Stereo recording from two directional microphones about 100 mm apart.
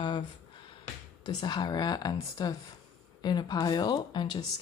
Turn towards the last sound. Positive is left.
turn(degrees=50)  # may be behind; listen again after turning